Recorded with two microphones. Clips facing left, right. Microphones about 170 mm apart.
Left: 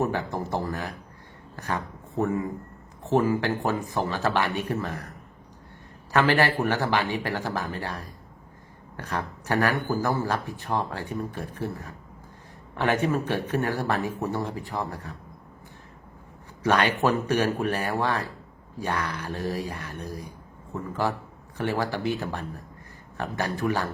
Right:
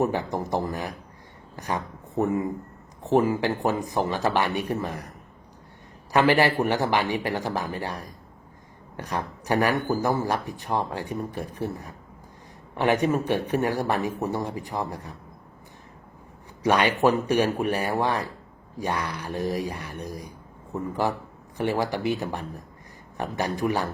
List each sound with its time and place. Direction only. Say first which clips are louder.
0.0 s speech: right 2 dB; 15° right (ahead or behind)
6.1 s speech: right 2 dB; 15° right (ahead or behind)
16.6 s speech: right 2 dB; 15° right (ahead or behind)